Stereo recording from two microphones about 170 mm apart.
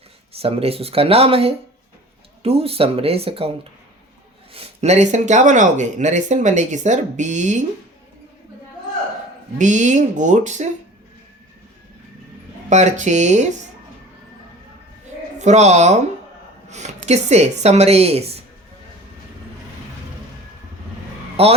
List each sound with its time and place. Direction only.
0.3 s a woman's voice: 35° right (ahead or behind)
9.6 s speech: 45° right (ahead or behind)
12.7 s speech: 45° right (ahead or behind)
15.4 s a woman's voice: 40° right (ahead or behind)
21.4 s a woman's voice: 35° right (ahead or behind)